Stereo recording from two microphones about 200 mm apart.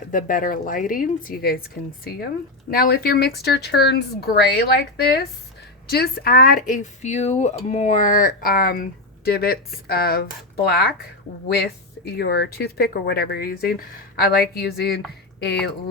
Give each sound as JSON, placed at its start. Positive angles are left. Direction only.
{"t": 0.1, "sound": "speech", "side_deg": 45}